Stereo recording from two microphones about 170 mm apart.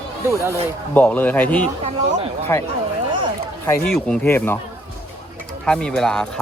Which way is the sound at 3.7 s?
15° left (ahead or behind).